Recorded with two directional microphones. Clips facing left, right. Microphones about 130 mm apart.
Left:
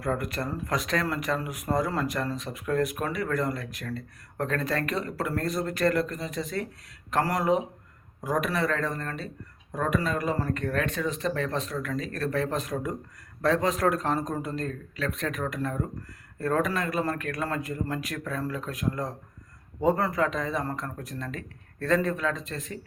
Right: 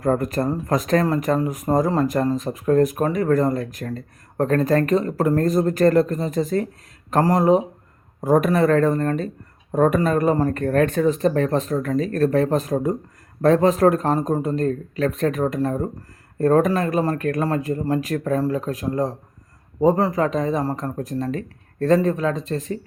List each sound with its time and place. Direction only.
0.0 s speech: 45° right (ahead or behind)
8.2 s speech: 50° right (ahead or behind)